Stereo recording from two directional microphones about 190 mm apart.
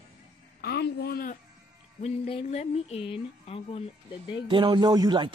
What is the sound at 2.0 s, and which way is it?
Speech, 30° left (ahead or behind).